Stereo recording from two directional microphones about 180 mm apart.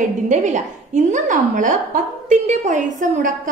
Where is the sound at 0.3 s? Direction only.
45° right (ahead or behind).